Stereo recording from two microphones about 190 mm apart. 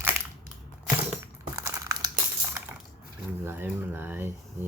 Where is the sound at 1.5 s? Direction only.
15° right (ahead or behind).